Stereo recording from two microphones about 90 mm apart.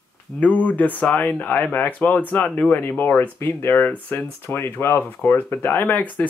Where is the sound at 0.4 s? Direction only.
15° left (ahead or behind).